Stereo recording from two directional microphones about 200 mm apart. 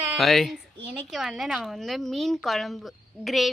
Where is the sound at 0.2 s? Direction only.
Centre (ahead or behind).